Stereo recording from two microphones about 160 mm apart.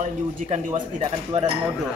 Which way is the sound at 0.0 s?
50° right (ahead or behind).